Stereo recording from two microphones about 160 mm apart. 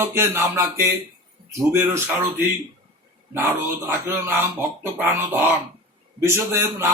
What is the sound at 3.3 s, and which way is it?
Speech, 15° right (ahead or behind).